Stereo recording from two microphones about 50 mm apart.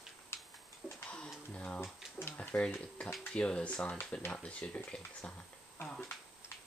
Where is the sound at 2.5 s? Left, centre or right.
Left.